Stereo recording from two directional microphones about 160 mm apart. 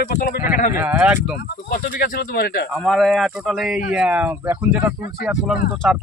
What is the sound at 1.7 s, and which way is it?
Speech, 60° left (ahead or behind).